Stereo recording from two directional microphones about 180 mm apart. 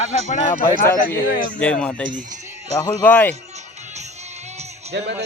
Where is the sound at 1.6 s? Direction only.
5° left (ahead or behind).